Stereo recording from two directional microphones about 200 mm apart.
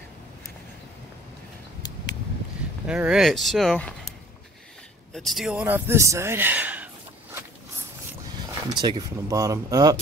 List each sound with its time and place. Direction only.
2.9 s speech: 5° right (ahead or behind)
5.1 s speech: centre (ahead or behind)
8.7 s speech: 20° right (ahead or behind)